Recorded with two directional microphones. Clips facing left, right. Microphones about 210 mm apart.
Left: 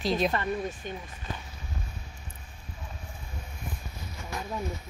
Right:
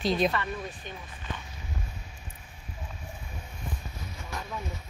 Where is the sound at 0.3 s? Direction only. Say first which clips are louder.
Left 3 dB; 40° left (ahead or behind).